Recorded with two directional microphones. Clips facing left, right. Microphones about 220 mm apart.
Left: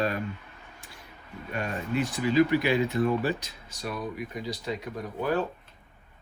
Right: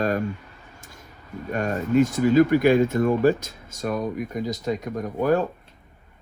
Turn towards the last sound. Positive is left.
turn(degrees=-45)  # may be behind; listen again after turning